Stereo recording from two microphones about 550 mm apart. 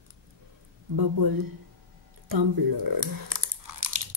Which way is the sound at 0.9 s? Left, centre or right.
Right.